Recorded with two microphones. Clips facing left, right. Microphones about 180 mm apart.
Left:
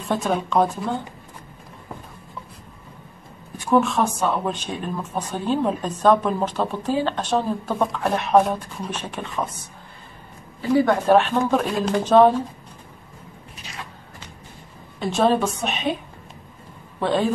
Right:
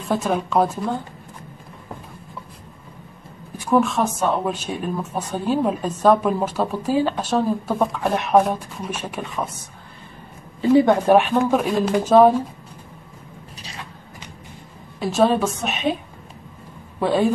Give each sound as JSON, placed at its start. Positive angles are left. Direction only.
{"t": 0.0, "sound": "a woman's voice", "side_deg": 0}
{"t": 3.6, "sound": "speech", "side_deg": 0}
{"t": 10.6, "sound": "speech", "side_deg": -20}
{"t": 15.0, "sound": "a woman's voice", "side_deg": -5}
{"t": 17.0, "sound": "speech", "side_deg": -10}